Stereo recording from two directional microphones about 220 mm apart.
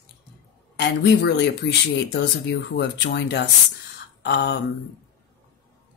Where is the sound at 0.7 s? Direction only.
50° left (ahead or behind).